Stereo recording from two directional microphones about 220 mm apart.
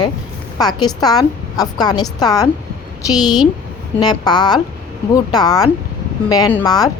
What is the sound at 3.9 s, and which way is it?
A woman's voice, 20° left (ahead or behind).